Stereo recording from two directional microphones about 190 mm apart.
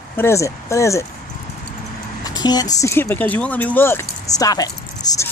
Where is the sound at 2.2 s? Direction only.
20° left (ahead or behind).